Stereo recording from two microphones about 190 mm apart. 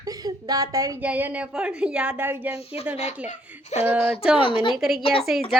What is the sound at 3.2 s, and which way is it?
A child's voice, 35° left (ahead or behind).